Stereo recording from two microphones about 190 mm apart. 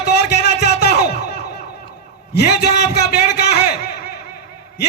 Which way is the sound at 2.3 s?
60° left (ahead or behind).